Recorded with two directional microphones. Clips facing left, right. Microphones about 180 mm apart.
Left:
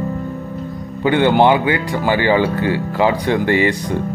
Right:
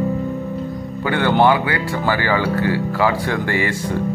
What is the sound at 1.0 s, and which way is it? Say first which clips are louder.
Speech: left 3 dB; 20° left (ahead or behind).